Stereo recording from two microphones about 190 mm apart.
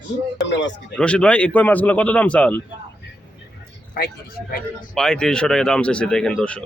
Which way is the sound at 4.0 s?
55° left (ahead or behind).